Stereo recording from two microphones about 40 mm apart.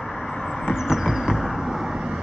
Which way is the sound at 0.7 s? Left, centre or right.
Centre.